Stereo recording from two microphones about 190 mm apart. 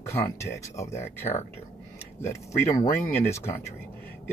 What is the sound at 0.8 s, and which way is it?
Speech, 35° left (ahead or behind).